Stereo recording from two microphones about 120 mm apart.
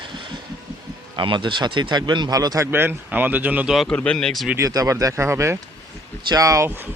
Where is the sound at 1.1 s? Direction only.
40° right (ahead or behind).